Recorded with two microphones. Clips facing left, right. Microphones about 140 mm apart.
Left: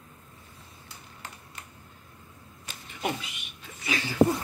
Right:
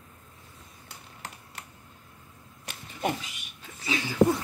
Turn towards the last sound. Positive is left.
turn(degrees=-15)  # may be behind; listen again after turning